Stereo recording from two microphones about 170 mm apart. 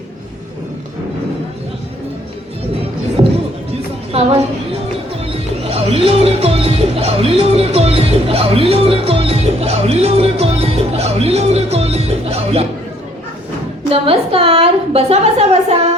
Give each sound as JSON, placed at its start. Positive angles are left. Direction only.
{"t": 3.7, "sound": "music", "side_deg": -40}
{"t": 13.9, "sound": "a woman's voice", "side_deg": -35}